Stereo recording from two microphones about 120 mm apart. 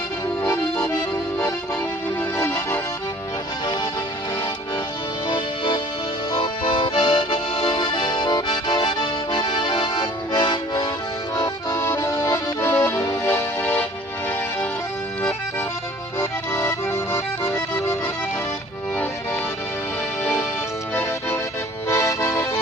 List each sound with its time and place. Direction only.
2.4 s music: 15° left (ahead or behind)
5.3 s music: 40° left (ahead or behind)
6.3 s accordion: 45° left (ahead or behind)
11.8 s accordion: 20° left (ahead or behind)
16.1 s accordion: 20° left (ahead or behind)
20.9 s music: 15° left (ahead or behind)